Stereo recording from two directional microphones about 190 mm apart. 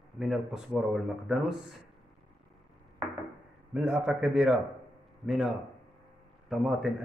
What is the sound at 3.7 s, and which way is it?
Speech, 5° right (ahead or behind).